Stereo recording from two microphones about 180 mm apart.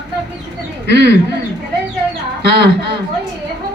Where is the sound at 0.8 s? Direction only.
70° right (ahead or behind).